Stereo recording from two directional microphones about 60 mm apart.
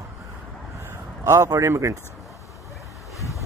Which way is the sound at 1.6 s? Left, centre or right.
Right.